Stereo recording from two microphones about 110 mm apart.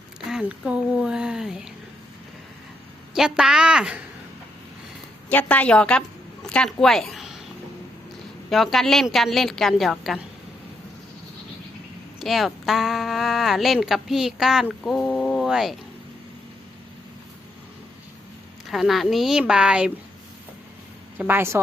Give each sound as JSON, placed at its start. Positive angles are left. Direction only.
{"t": 0.3, "sound": "speech", "side_deg": -5}
{"t": 3.2, "sound": "speech", "side_deg": -5}
{"t": 5.3, "sound": "a woman's voice", "side_deg": 15}
{"t": 8.4, "sound": "speech", "side_deg": 0}
{"t": 12.2, "sound": "speech", "side_deg": 0}
{"t": 18.7, "sound": "speech", "side_deg": 0}
{"t": 21.2, "sound": "a woman's voice", "side_deg": -20}